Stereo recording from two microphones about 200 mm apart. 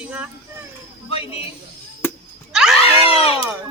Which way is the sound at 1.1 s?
30° left (ahead or behind).